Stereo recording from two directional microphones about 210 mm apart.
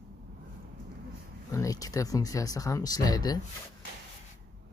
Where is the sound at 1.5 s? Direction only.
15° left (ahead or behind).